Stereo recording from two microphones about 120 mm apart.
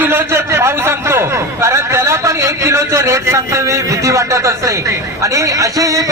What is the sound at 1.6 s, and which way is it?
A man's voice, 25° right (ahead or behind).